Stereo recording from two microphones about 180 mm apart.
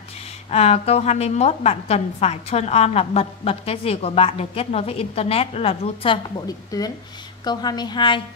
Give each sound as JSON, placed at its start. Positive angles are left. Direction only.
{"t": 0.5, "sound": "a woman's voice", "side_deg": 35}